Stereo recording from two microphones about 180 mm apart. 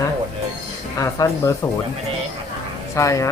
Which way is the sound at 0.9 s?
15° left (ahead or behind).